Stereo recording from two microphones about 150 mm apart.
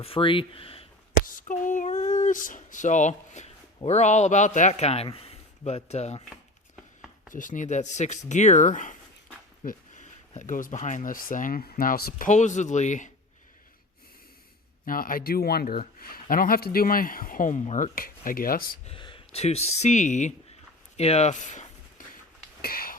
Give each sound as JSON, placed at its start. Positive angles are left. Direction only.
{"t": 0.0, "sound": "speech", "side_deg": 35}
{"t": 1.2, "sound": "a man's voice", "side_deg": 65}
{"t": 7.3, "sound": "a man's voice", "side_deg": 60}
{"t": 12.3, "sound": "a man's voice", "side_deg": 50}
{"t": 14.8, "sound": "speech", "side_deg": 70}
{"t": 16.0, "sound": "speech", "side_deg": 75}
{"t": 17.9, "sound": "speech", "side_deg": 70}
{"t": 18.9, "sound": "speech", "side_deg": 35}
{"t": 20.9, "sound": "a sound", "side_deg": 45}
{"t": 22.6, "sound": "a sound", "side_deg": 75}